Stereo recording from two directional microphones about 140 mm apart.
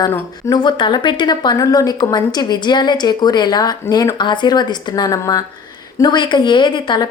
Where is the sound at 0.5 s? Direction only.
30° left (ahead or behind).